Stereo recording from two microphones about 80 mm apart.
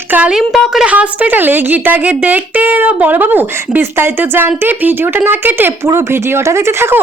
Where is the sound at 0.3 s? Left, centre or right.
Centre.